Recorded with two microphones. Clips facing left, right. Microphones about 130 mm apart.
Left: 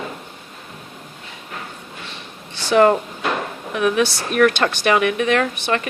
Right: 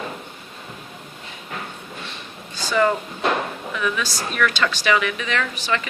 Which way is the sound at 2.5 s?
70° left (ahead or behind).